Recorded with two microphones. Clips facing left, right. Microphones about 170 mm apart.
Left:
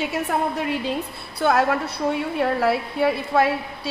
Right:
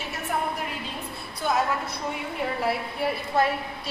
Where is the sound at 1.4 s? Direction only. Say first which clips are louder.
Left 6 dB; 70° left (ahead or behind).